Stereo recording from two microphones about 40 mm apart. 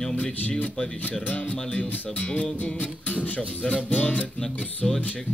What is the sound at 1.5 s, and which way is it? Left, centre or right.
Speech, left.